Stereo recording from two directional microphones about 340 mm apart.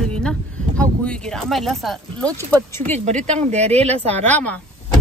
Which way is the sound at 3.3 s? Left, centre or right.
Centre.